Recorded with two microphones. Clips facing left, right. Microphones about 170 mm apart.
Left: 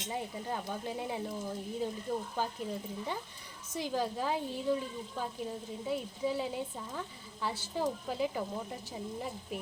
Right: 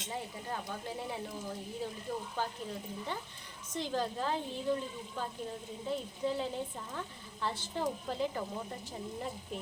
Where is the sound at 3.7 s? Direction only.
10° left (ahead or behind).